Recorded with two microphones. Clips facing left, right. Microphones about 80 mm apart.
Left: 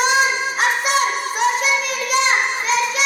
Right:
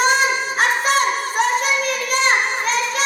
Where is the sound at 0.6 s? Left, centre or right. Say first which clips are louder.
Right 1 dB; right.